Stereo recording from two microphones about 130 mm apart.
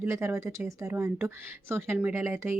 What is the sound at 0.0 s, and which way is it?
Speech, 20° right (ahead or behind).